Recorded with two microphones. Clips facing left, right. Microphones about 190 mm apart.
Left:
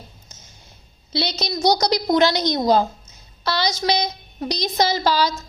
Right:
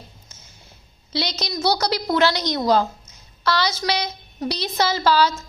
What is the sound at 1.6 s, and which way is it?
A woman's voice, 15° left (ahead or behind).